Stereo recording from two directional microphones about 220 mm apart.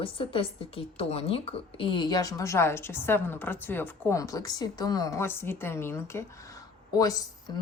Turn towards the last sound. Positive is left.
turn(degrees=20)  # may be behind; listen again after turning